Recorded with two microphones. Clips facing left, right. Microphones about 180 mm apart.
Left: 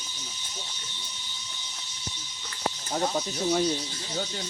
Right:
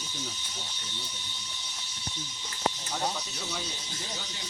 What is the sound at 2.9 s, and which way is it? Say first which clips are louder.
Speech: left 6 dB; 50° left (ahead or behind).